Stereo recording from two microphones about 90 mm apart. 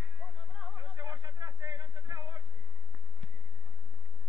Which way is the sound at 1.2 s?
60° right (ahead or behind).